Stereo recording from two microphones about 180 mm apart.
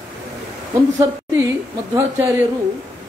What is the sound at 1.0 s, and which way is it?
A woman's voice, 15° right (ahead or behind).